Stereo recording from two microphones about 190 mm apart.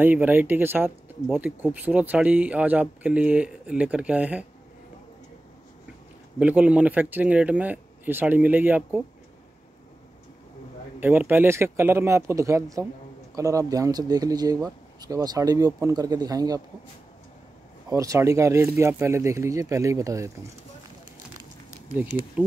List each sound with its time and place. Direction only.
0.0 s speech: 10° right (ahead or behind)
6.4 s speech: 5° right (ahead or behind)
11.0 s speech: 10° right (ahead or behind)
17.8 s speech: 15° right (ahead or behind)